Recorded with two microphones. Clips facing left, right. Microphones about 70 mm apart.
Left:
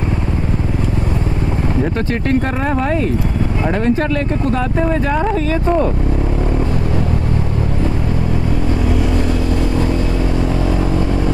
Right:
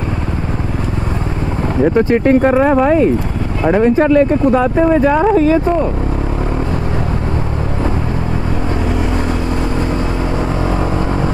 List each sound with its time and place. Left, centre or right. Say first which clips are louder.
1.8 s speech: right 11 dB; centre